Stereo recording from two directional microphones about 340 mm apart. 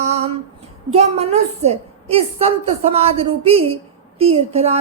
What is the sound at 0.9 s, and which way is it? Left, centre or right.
A woman's voice, centre.